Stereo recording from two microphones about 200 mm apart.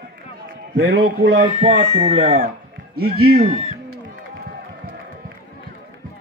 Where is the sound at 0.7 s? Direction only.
50° right (ahead or behind).